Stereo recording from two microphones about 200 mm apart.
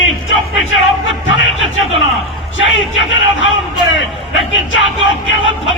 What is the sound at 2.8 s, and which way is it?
Speech, 70° left (ahead or behind).